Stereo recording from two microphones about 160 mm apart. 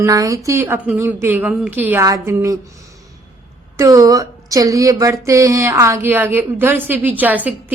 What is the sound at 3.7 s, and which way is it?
Speech, 20° right (ahead or behind).